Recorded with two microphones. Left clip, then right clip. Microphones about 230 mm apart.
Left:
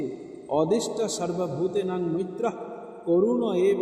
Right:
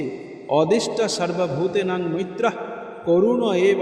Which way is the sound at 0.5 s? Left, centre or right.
Right.